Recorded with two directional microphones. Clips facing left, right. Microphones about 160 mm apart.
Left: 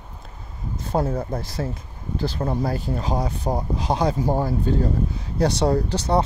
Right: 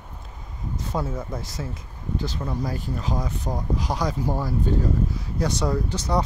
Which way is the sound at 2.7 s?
30° left (ahead or behind).